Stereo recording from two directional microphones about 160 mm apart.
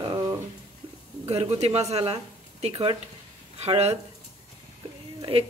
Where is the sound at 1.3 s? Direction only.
40° right (ahead or behind).